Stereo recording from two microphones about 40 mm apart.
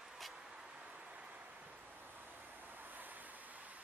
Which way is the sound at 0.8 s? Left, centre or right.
Right.